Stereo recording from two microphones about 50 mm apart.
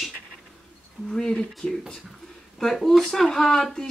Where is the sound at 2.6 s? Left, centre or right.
Centre.